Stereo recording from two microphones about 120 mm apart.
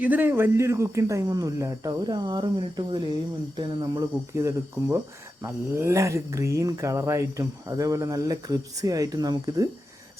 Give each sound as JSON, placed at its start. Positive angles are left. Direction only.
{"t": 0.0, "sound": "speech", "side_deg": -15}